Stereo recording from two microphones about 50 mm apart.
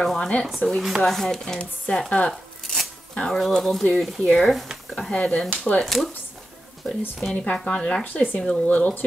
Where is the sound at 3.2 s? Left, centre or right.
Centre.